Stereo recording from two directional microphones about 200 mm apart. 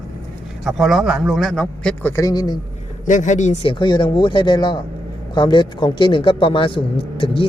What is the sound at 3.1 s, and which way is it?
A man's voice, 40° left (ahead or behind).